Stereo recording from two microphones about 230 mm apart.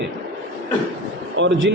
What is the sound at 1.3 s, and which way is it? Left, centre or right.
Speech, right.